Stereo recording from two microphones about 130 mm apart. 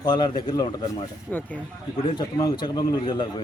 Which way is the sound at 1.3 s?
15° left (ahead or behind).